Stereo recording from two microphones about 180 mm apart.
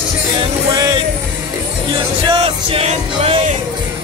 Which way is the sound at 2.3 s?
35° right (ahead or behind).